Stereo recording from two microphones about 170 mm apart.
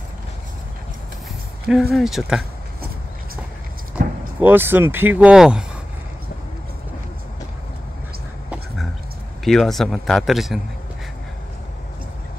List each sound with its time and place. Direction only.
1.7 s speech: centre (ahead or behind)
4.4 s speech: 10° right (ahead or behind)
9.4 s speech: centre (ahead or behind)